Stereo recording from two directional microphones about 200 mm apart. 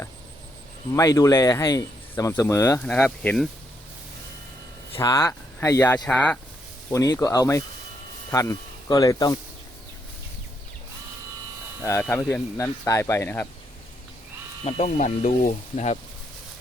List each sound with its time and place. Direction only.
0.9 s speech: 15° left (ahead or behind)
4.9 s speech: 15° left (ahead or behind)
6.9 s speech: 15° left (ahead or behind)
11.8 s speech: 15° left (ahead or behind)
14.6 s speech: 35° left (ahead or behind)